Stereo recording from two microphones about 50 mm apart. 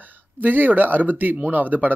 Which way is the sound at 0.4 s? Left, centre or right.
Right.